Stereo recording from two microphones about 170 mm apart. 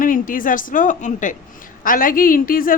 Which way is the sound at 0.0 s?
55° left (ahead or behind).